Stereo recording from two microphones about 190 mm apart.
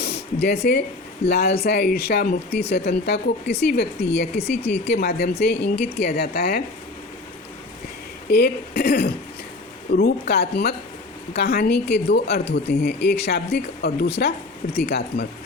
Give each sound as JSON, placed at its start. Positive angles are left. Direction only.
{"t": 0.0, "sound": "a sound", "side_deg": 60}
{"t": 1.3, "sound": "speech", "side_deg": 55}
{"t": 8.3, "sound": "speech", "side_deg": 60}